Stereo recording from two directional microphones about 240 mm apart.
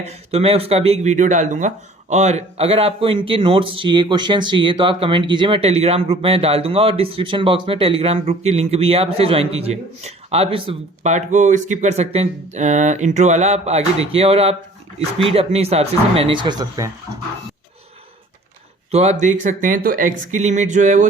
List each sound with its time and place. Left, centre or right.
0.0 s speech: right
18.9 s speech: right